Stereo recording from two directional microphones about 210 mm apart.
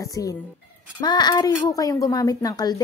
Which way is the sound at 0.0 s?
15° left (ahead or behind).